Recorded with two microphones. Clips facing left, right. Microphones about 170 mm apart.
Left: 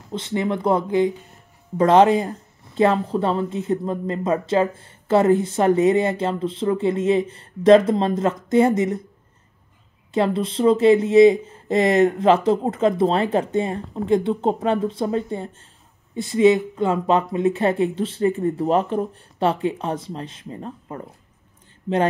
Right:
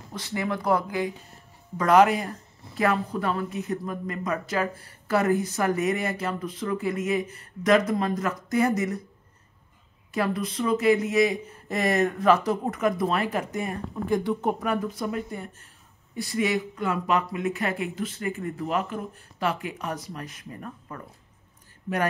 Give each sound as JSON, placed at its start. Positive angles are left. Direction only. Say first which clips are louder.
{"t": 0.1, "sound": "speech", "louder": "left 6 dB", "side_deg": 25}
{"t": 10.1, "sound": "speech", "louder": "left 6 dB", "side_deg": 25}